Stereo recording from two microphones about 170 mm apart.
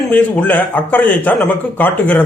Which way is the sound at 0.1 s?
10° left (ahead or behind).